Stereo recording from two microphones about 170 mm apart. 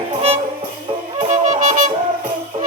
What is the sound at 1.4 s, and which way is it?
Music, 45° right (ahead or behind).